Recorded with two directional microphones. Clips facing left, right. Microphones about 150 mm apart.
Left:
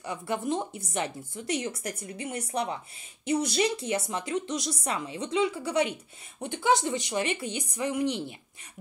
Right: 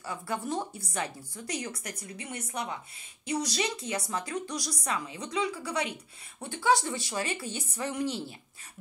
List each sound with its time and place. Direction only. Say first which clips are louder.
0.0 s a woman's voice: left 3 dB; 20° left (ahead or behind)